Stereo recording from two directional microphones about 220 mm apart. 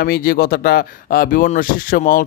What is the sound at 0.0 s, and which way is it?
Speech, 40° left (ahead or behind).